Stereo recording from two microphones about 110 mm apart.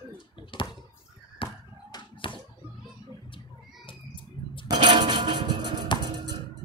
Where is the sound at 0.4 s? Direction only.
50° left (ahead or behind).